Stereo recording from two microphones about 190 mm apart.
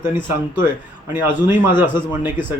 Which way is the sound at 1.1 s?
10° right (ahead or behind).